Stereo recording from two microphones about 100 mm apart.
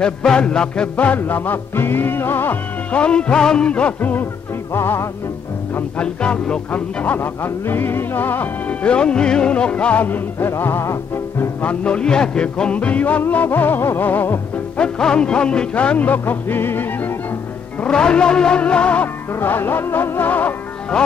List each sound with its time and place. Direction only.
0.0 s music: 10° left (ahead or behind); by 5.0 s 25° left (ahead or behind)
5.8 s music: 15° left (ahead or behind)
11.6 s music: 10° left (ahead or behind)
14.8 s music: 10° left (ahead or behind)
17.7 s music: 10° left (ahead or behind)